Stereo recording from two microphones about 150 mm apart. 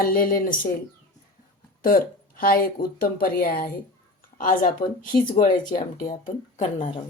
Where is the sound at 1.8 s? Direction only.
75° left (ahead or behind).